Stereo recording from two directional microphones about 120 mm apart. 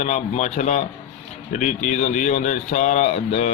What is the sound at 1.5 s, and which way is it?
Speech, 90° left.